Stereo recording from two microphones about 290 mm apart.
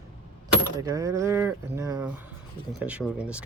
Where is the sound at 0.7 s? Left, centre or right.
Centre.